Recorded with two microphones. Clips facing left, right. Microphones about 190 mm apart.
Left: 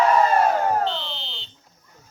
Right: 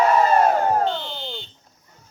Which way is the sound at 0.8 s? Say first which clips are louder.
Right 3 dB; 50° right (ahead or behind).